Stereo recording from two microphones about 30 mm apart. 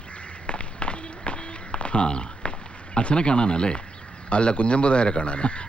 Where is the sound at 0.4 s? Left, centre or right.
Left.